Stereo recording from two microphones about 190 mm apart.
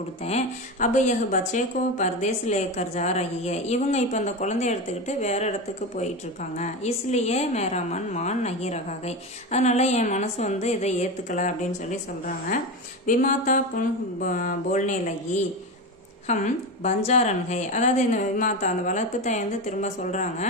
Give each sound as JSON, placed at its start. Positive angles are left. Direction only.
{"t": 0.2, "sound": "speech", "side_deg": 40}
{"t": 13.0, "sound": "a sound", "side_deg": 45}
{"t": 14.2, "sound": "speech", "side_deg": 45}